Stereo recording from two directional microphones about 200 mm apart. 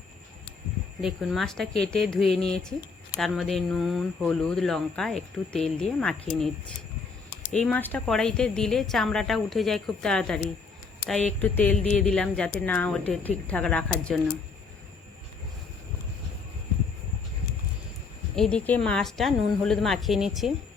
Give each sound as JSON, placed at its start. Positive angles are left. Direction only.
{"t": 1.0, "sound": "speech", "side_deg": 0}
{"t": 7.3, "sound": "a sound", "side_deg": 45}
{"t": 7.6, "sound": "speech", "side_deg": 10}
{"t": 18.3, "sound": "speech", "side_deg": 5}